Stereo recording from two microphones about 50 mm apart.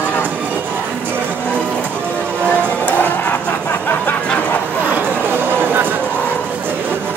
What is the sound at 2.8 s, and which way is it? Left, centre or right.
Music, left.